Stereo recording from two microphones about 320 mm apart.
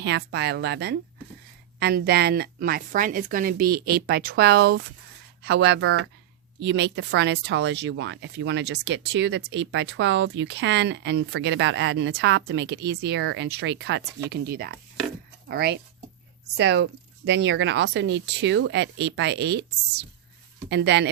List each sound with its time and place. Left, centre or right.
0.0 s a woman's voice: right